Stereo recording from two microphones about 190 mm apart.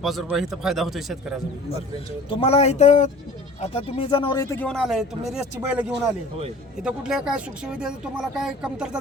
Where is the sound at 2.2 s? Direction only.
30° left (ahead or behind).